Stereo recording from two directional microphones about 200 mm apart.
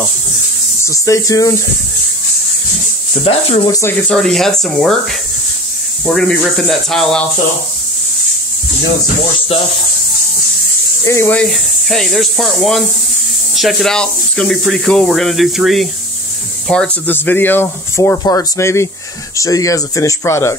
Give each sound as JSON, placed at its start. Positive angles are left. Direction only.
{"t": 0.8, "sound": "speech", "side_deg": 15}
{"t": 3.1, "sound": "speech", "side_deg": 30}
{"t": 4.1, "sound": "speech", "side_deg": 0}
{"t": 6.0, "sound": "speech", "side_deg": 5}
{"t": 11.1, "sound": "speech", "side_deg": 10}